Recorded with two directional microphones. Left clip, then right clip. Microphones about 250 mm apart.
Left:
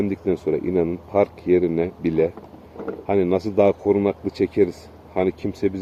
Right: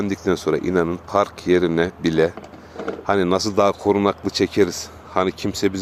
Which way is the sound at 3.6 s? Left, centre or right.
Right.